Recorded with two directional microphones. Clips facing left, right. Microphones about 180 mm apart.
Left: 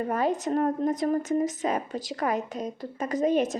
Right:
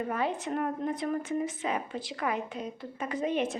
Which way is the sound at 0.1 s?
40° left (ahead or behind).